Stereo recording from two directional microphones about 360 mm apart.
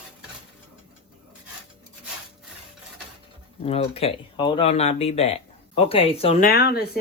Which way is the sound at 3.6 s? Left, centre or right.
Centre.